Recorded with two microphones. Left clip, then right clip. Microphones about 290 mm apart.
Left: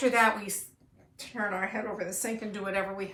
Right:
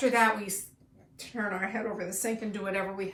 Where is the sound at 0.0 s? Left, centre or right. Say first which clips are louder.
Even; centre.